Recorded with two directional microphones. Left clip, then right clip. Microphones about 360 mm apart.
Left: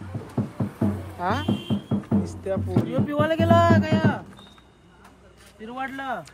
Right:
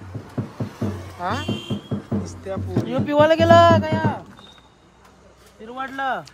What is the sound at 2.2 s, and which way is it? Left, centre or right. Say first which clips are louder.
Music: left 2 dB; centre.